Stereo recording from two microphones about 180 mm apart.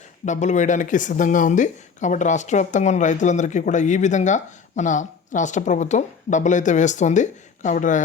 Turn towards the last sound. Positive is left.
turn(degrees=45)  # may be behind; listen again after turning